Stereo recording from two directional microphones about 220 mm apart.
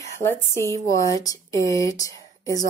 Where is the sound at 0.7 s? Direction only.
15° left (ahead or behind).